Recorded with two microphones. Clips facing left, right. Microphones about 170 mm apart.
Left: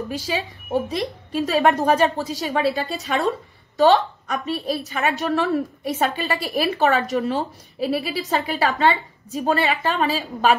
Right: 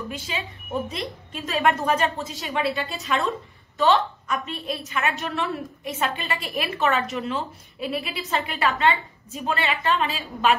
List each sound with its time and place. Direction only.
0.1 s a woman's voice: 35° left (ahead or behind)